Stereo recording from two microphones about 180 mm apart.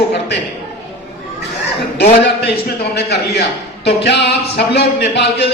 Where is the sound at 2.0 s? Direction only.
65° left (ahead or behind).